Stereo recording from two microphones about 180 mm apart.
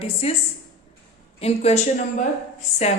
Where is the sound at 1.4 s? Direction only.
35° left (ahead or behind).